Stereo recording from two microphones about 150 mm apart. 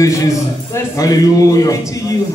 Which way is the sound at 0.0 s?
20° left (ahead or behind).